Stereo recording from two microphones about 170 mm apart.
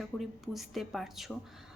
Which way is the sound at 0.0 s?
Centre (ahead or behind).